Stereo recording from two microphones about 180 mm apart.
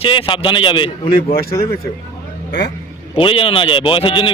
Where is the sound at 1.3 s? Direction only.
55° left (ahead or behind).